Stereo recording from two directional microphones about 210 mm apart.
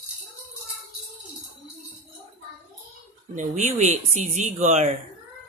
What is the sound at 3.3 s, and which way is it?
Speech, 35° right (ahead or behind).